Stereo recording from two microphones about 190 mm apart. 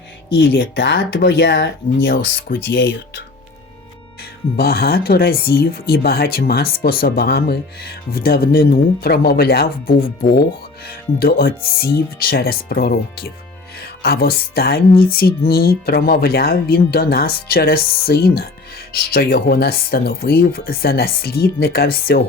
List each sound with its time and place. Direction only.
0.3 s speech: 75° left (ahead or behind)
4.5 s speech: 55° left (ahead or behind)